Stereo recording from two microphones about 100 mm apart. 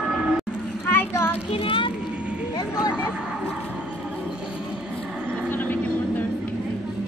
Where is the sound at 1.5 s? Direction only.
65° left (ahead or behind).